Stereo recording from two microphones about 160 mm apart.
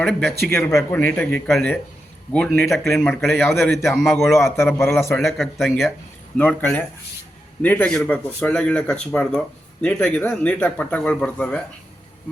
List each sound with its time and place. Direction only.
0.0 s speech: 5° left (ahead or behind)
0.5 s speech: 20° left (ahead or behind)
0.9 s speech: 10° left (ahead or behind)
4.2 s speech: 15° left (ahead or behind)
5.1 s speech: centre (ahead or behind)